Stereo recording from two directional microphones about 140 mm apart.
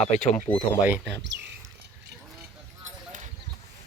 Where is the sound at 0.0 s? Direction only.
55° left (ahead or behind).